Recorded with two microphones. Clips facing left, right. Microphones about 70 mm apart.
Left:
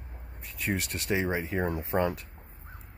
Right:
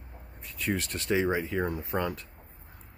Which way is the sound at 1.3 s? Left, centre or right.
Left.